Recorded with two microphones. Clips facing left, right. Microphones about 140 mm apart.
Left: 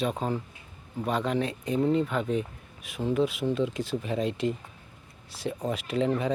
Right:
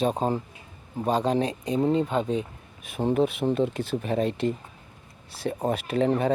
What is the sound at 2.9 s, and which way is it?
Speech, 55° right (ahead or behind).